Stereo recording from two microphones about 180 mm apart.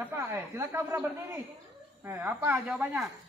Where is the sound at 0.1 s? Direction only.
15° right (ahead or behind).